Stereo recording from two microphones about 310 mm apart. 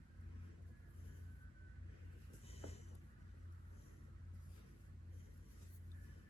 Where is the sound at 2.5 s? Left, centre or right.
Centre.